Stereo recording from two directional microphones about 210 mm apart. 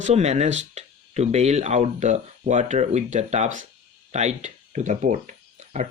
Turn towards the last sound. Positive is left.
turn(degrees=-35)  # may be behind; listen again after turning